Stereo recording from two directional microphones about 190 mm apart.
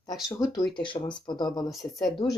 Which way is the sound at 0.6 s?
25° left (ahead or behind).